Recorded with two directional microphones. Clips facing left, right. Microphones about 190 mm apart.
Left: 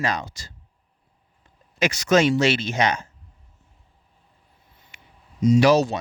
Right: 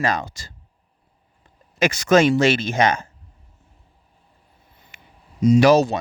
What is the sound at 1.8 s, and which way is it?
Speech, 50° right (ahead or behind).